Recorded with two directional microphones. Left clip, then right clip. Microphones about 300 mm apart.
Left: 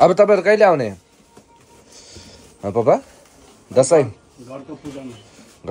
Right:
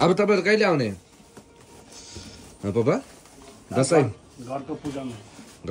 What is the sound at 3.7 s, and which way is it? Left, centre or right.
Speech, centre.